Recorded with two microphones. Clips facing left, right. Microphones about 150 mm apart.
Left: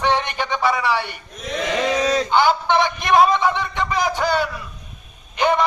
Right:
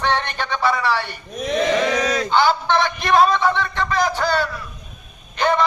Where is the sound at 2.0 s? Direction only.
30° left (ahead or behind).